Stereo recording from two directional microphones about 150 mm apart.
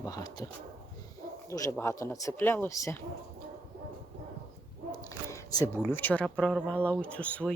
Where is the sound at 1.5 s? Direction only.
20° left (ahead or behind).